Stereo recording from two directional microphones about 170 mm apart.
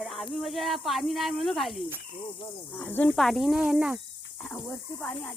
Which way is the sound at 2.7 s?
10° left (ahead or behind).